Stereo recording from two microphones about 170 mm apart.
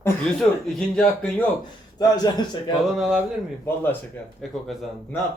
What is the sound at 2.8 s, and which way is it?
Speech, centre (ahead or behind).